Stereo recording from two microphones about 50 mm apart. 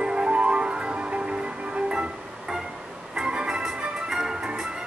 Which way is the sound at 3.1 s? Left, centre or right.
Centre.